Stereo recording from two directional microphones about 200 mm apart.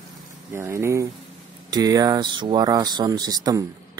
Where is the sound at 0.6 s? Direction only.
15° right (ahead or behind).